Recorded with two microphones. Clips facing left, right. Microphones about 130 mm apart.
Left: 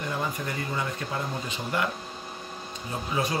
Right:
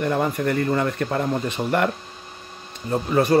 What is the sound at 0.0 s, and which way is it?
A man's voice, 60° right (ahead or behind).